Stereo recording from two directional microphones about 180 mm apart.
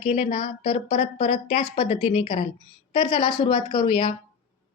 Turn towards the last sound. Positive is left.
turn(degrees=25)  # may be behind; listen again after turning